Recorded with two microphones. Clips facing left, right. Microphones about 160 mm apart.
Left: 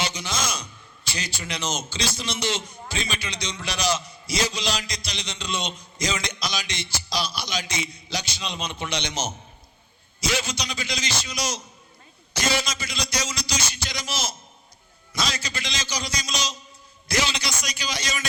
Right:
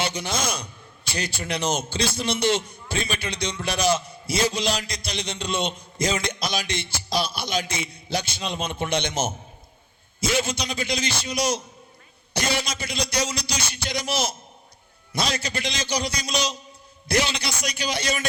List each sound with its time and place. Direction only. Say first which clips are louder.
0.0 s a man's voice: right 2 dB; 55° right (ahead or behind)